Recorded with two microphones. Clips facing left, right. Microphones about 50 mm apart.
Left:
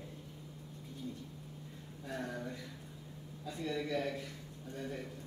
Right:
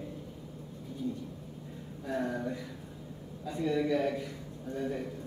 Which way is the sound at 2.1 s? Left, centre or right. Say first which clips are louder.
Right 8 dB; centre.